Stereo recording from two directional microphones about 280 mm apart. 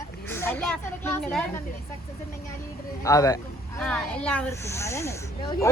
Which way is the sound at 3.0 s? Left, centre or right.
Centre.